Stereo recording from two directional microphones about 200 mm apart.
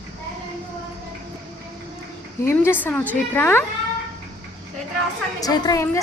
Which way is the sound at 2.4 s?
10° left (ahead or behind).